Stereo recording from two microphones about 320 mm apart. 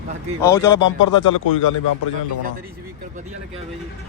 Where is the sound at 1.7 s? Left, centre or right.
Left.